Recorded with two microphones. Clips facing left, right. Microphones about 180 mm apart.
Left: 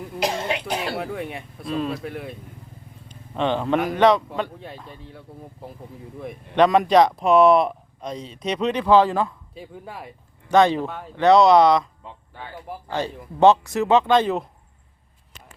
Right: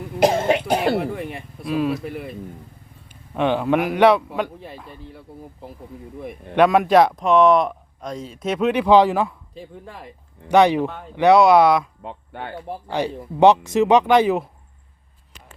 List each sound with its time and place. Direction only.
0.2 s cough: 50° right (ahead or behind)
0.9 s a man's voice: centre (ahead or behind)
7.3 s speech: 35° left (ahead or behind)
7.5 s a man's voice: centre (ahead or behind)
9.6 s a man's voice: 5° left (ahead or behind)
10.5 s speech: 15° right (ahead or behind)
10.8 s a man's voice: centre (ahead or behind)
12.0 s speech: 60° right (ahead or behind)
13.4 s speech: 15° right (ahead or behind)